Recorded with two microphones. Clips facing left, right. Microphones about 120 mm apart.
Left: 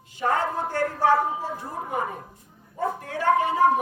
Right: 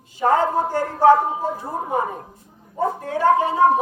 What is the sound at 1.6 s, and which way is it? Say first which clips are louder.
A woman's voice: right 5 dB; 25° right (ahead or behind).